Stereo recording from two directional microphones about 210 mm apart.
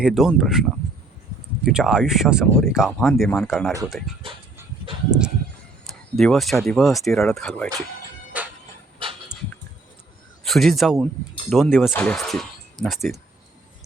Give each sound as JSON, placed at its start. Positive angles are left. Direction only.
{"t": 0.0, "sound": "speech", "side_deg": 0}
{"t": 1.6, "sound": "speech", "side_deg": -5}
{"t": 5.8, "sound": "speech", "side_deg": 0}
{"t": 8.3, "sound": "music", "side_deg": -5}
{"t": 9.0, "sound": "dog", "side_deg": -25}
{"t": 10.4, "sound": "speech", "side_deg": 0}